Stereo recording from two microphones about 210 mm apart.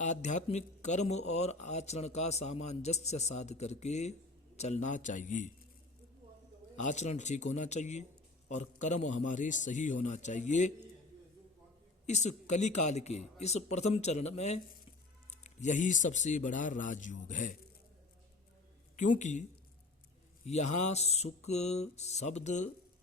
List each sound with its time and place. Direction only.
0.0 s speech: 35° left (ahead or behind)
6.7 s speech: 35° left (ahead or behind)
12.0 s speech: 35° left (ahead or behind)
18.9 s speech: 35° left (ahead or behind)
20.5 s speech: 35° left (ahead or behind)